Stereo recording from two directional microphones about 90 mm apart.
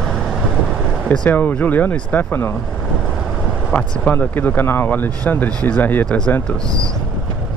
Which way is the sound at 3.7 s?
15° left (ahead or behind).